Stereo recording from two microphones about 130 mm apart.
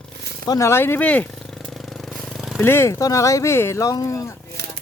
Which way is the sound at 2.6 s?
20° left (ahead or behind).